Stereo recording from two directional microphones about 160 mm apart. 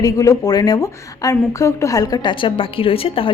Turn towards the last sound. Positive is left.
turn(degrees=35)  # may be behind; listen again after turning